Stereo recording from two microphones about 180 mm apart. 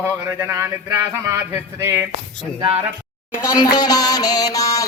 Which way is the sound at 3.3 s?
20° left (ahead or behind).